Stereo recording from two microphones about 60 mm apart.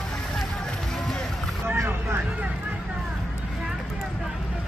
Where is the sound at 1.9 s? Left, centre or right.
Right.